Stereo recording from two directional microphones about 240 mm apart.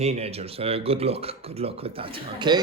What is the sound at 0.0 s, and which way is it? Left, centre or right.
Speech, right.